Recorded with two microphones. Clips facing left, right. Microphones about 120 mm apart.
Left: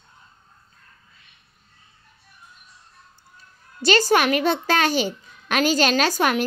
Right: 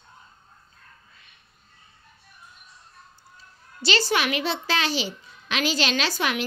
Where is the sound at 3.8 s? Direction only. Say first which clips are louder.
Left 6 dB; 45° left (ahead or behind).